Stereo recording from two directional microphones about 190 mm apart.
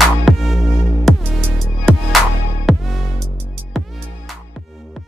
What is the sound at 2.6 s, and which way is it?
Music, centre (ahead or behind).